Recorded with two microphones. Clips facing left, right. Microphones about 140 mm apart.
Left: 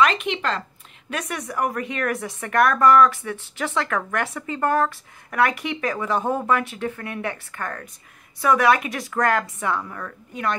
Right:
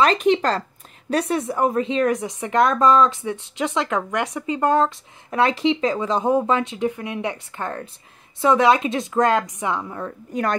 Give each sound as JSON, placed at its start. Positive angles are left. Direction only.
{"t": 0.0, "sound": "a woman's voice", "side_deg": -35}
{"t": 10.3, "sound": "speech", "side_deg": -40}